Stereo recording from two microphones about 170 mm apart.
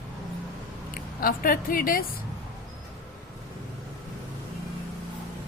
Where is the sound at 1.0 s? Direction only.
60° left (ahead or behind).